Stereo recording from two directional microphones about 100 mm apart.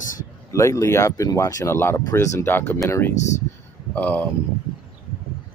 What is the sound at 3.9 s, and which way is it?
Speech, 15° left (ahead or behind).